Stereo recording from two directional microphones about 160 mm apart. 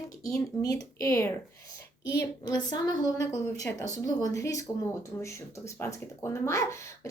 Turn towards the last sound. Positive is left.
turn(degrees=20)  # may be behind; listen again after turning